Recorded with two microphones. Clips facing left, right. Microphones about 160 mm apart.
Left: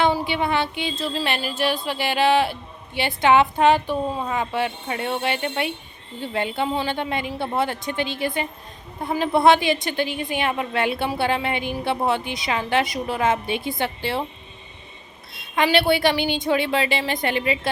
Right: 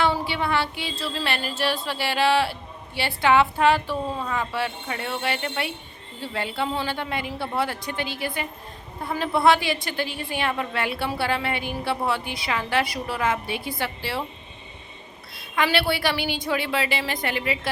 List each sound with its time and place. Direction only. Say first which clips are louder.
0.0 s music: left 3 dB; 20° left (ahead or behind)
15.3 s music: left 3 dB; 25° left (ahead or behind)